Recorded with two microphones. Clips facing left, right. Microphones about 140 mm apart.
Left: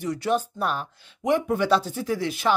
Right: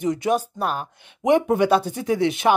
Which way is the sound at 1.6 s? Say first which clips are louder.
Right 3 dB; 55° right (ahead or behind).